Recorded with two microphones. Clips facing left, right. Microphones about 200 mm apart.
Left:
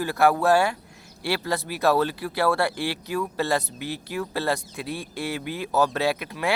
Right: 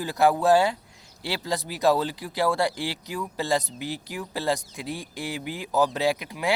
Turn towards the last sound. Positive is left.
turn(degrees=-15)  # may be behind; listen again after turning